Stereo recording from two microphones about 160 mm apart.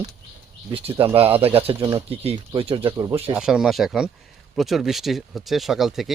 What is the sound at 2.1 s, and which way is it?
Speech, 35° right (ahead or behind).